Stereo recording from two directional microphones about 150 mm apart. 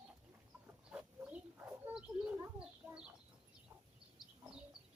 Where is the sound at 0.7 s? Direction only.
5° right (ahead or behind).